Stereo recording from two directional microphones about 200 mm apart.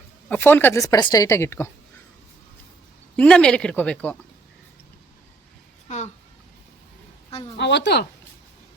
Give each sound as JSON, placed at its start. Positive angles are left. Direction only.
{"t": 0.3, "sound": "speech", "side_deg": 10}
{"t": 3.2, "sound": "speech", "side_deg": 5}
{"t": 7.6, "sound": "a woman's voice", "side_deg": 60}